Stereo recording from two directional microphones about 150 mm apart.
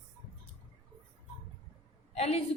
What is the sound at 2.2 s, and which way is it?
Speech, 45° left (ahead or behind).